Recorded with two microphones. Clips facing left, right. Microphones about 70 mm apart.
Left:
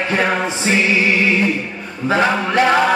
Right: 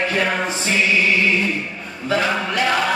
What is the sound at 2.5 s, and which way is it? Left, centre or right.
Music, left.